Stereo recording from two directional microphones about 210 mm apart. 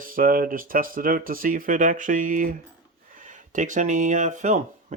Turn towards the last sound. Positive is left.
turn(degrees=-35)  # may be behind; listen again after turning